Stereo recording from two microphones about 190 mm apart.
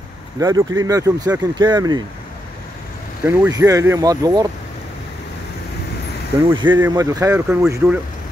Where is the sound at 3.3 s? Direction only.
15° right (ahead or behind).